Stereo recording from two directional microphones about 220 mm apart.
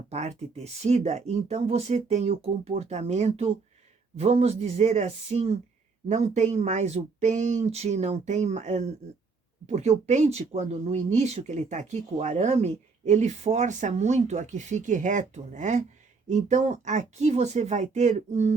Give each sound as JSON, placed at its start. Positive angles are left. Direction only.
{"t": 0.1, "sound": "speech", "side_deg": -30}